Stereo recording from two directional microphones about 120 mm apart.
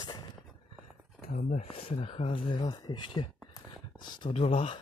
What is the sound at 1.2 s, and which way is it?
Speech, 60° left (ahead or behind).